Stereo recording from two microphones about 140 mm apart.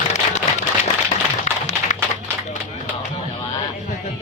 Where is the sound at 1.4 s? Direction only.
60° left (ahead or behind).